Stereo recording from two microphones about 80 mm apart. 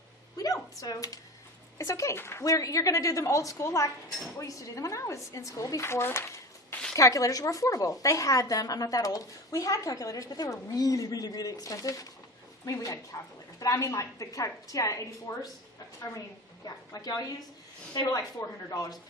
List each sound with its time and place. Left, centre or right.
0.3 s a sound: left
1.8 s a woman's voice: left
6.9 s a woman's voice: left
16.6 s a woman's voice: left
18.3 s a woman's voice: left